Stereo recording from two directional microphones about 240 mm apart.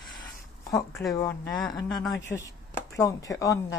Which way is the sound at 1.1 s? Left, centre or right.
Centre.